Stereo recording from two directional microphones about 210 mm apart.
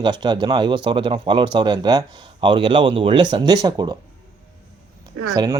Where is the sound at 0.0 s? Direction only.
20° right (ahead or behind).